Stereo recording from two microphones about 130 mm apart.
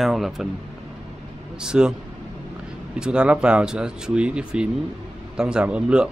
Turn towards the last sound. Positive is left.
turn(degrees=-10)  # may be behind; listen again after turning